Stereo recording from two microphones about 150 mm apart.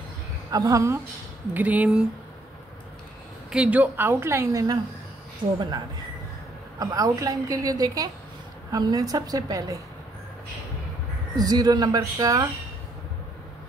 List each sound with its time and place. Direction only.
0.5 s a woman's voice: 20° right (ahead or behind)
1.5 s a woman's voice: 10° right (ahead or behind)
3.5 s a woman's voice: 10° right (ahead or behind)
6.8 s a woman's voice: 25° right (ahead or behind)
11.3 s a woman's voice: 25° right (ahead or behind)